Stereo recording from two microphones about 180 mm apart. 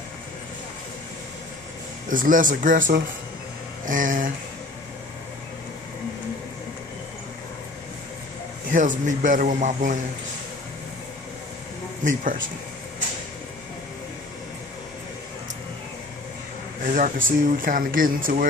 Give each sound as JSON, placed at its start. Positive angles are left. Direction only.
{"t": 2.0, "sound": "speech", "side_deg": -50}
{"t": 8.7, "sound": "speech", "side_deg": -45}
{"t": 12.0, "sound": "speech", "side_deg": -45}
{"t": 16.8, "sound": "speech", "side_deg": -50}